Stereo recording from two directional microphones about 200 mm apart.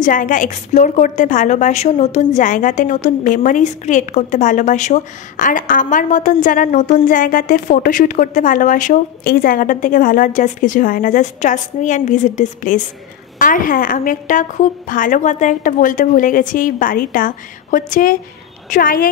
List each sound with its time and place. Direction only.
0.0 s a woman's voice: 40° left (ahead or behind)